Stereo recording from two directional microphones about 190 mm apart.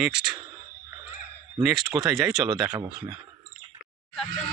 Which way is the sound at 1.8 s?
20° right (ahead or behind).